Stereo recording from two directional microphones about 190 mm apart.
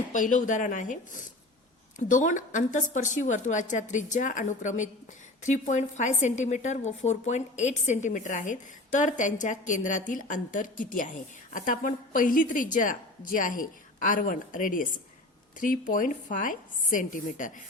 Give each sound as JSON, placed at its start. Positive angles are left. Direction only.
{"t": 0.1, "sound": "a woman's voice", "side_deg": 40}